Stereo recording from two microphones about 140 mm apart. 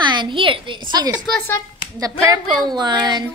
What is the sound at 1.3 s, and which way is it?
Speech, 15° left (ahead or behind).